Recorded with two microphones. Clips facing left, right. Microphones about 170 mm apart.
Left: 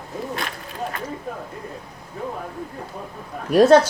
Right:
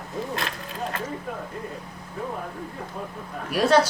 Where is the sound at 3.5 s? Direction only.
45° left (ahead or behind).